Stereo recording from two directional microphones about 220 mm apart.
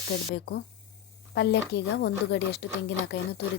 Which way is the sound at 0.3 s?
50° left (ahead or behind).